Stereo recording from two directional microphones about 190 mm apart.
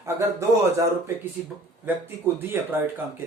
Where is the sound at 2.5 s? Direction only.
10° right (ahead or behind).